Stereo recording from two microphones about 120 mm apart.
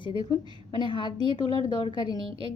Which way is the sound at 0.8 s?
40° left (ahead or behind).